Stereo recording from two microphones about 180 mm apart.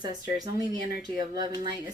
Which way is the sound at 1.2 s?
25° right (ahead or behind).